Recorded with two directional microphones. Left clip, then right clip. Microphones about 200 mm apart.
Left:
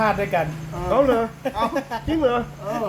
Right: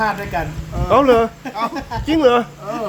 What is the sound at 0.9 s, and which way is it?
Speech, 60° right (ahead or behind).